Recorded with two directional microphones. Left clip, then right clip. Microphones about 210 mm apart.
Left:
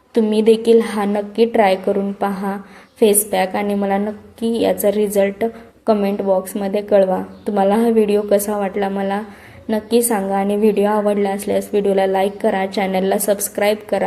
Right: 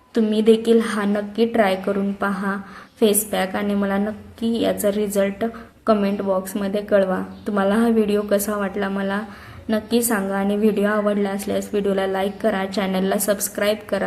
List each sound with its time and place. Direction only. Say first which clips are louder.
0.1 s a woman's voice: left 3 dB; centre (ahead or behind)